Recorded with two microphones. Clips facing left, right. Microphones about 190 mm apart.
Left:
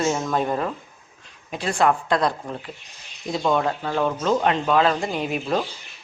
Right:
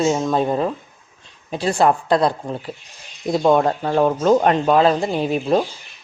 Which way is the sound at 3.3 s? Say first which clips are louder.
Right 6 dB; 45° right (ahead or behind).